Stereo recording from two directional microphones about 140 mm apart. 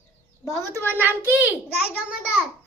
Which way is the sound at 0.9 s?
15° right (ahead or behind).